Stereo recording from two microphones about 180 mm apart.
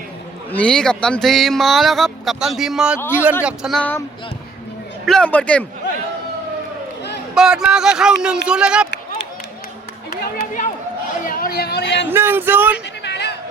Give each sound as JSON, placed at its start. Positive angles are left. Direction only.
{"t": 0.5, "sound": "speech", "side_deg": 5}
{"t": 5.0, "sound": "a man's voice", "side_deg": 5}
{"t": 7.3, "sound": "speech", "side_deg": -5}
{"t": 10.1, "sound": "speech", "side_deg": 50}
{"t": 12.1, "sound": "speech", "side_deg": -10}
{"t": 13.0, "sound": "a sound", "side_deg": 70}